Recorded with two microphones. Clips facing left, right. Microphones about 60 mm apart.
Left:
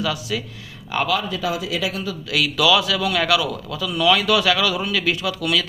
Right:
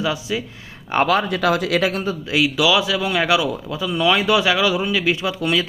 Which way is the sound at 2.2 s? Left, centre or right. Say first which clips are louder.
Right 1 dB; right.